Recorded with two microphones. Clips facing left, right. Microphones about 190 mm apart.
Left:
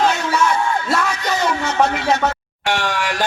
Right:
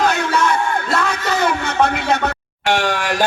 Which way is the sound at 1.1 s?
60° right (ahead or behind).